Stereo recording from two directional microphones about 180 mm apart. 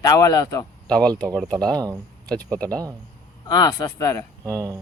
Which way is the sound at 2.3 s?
5° left (ahead or behind).